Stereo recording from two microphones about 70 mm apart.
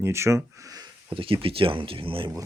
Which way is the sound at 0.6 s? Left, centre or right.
Right.